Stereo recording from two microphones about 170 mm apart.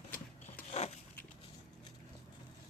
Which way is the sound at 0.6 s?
40° left (ahead or behind).